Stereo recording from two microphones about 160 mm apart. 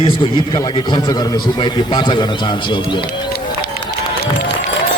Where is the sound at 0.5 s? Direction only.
25° left (ahead or behind).